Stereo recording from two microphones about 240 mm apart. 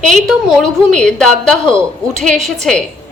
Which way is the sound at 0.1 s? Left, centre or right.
Centre.